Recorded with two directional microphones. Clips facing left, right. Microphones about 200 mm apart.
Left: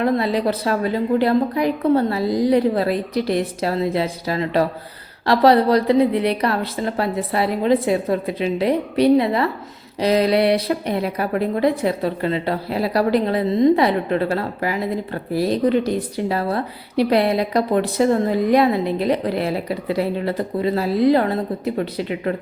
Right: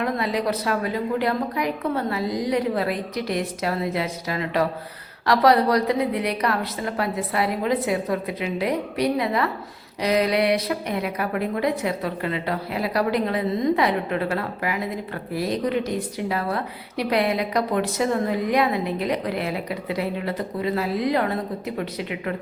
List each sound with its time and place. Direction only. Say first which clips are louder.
0.0 s a woman's voice: left 5 dB; 30° left (ahead or behind)